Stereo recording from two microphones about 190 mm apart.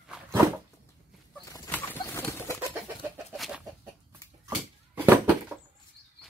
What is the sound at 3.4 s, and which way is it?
Chicken, 5° right (ahead or behind).